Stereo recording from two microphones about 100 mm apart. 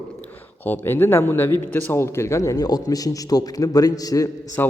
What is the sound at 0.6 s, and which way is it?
A man's voice, 20° left (ahead or behind).